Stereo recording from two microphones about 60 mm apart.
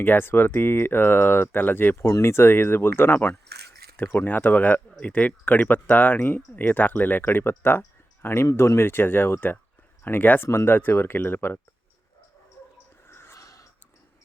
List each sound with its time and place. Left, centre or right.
0.0 s speech: left
13.1 s snort: left
13.4 s a sound: left